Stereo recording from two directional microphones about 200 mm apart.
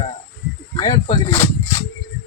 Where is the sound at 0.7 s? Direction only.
20° left (ahead or behind).